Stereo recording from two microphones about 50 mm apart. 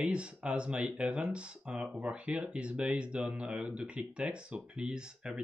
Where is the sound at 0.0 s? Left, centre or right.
Right.